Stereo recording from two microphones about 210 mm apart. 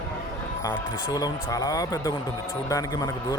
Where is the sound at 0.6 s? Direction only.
20° left (ahead or behind).